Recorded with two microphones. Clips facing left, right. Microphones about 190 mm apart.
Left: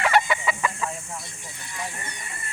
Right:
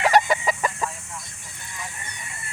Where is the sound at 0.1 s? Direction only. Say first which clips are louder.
Right 3 dB; 40° right (ahead or behind).